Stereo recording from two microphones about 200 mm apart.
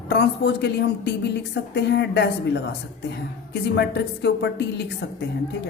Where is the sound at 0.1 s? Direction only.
55° left (ahead or behind).